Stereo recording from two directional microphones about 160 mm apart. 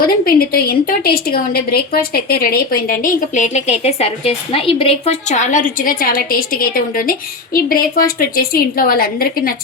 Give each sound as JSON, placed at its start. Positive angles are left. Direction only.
{"t": 0.0, "sound": "a woman's voice", "side_deg": 70}